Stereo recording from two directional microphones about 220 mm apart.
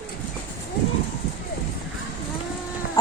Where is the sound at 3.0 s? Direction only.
15° left (ahead or behind).